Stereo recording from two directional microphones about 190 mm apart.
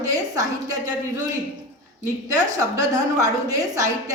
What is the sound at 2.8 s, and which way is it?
A woman's voice, 15° right (ahead or behind).